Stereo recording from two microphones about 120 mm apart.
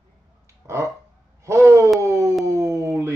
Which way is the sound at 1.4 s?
25° right (ahead or behind).